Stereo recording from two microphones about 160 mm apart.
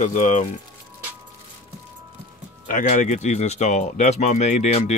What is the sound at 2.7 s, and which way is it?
Speech, 50° left (ahead or behind).